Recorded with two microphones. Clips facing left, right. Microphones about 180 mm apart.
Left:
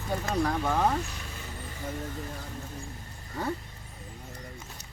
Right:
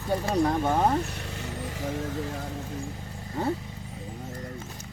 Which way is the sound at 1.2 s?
70° right (ahead or behind).